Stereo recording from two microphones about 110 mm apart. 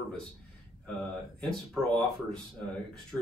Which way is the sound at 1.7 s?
5° left (ahead or behind).